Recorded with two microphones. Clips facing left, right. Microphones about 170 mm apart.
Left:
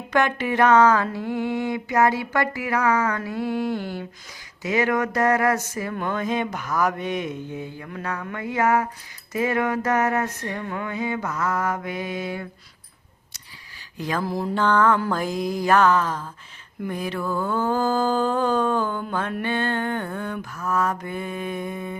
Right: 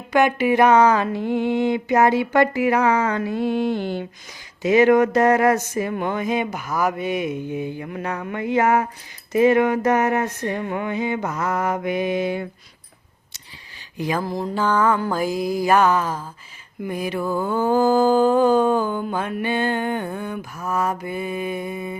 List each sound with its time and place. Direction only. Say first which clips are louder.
0.1 s a sound: right 5 dB; 10° right (ahead or behind)
4.6 s mantra: right 8 dB; 25° right (ahead or behind)
9.3 s a sound: right 7 dB; 20° right (ahead or behind)
14.0 s mantra: right 3 dB; 10° right (ahead or behind)
14.3 s mantra: right 1 dB; 5° left (ahead or behind)
14.5 s mantra: even; 5° right (ahead or behind)